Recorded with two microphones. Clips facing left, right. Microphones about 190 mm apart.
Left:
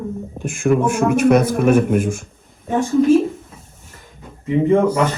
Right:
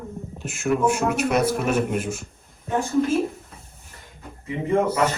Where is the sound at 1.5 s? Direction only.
55° left (ahead or behind).